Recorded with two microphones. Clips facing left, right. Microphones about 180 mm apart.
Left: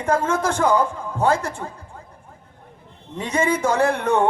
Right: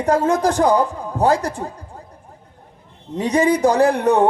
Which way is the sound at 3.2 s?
35° right (ahead or behind).